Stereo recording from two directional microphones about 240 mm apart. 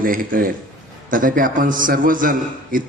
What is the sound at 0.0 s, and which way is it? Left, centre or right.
A man's voice, right.